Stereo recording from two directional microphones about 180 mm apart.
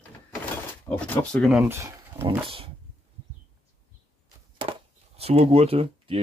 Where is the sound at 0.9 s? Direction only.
5° left (ahead or behind).